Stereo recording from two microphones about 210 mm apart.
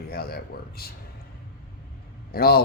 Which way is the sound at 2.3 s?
45° left (ahead or behind).